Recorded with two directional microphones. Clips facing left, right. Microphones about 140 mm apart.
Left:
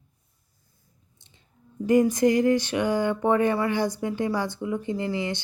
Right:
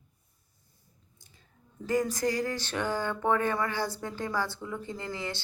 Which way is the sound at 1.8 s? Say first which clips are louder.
Left 9 dB; 20° left (ahead or behind).